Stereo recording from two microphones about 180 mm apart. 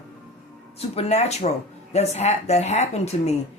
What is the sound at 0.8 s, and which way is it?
Speech, 35° left (ahead or behind).